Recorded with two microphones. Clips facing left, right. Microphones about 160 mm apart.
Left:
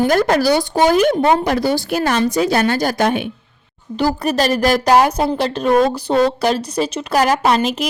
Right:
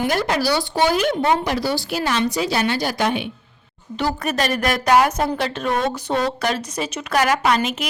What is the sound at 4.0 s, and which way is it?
Speech, 35° left (ahead or behind).